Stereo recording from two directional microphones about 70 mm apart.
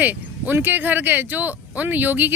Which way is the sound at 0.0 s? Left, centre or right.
Right.